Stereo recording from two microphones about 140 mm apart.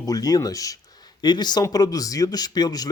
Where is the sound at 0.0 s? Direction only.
25° left (ahead or behind).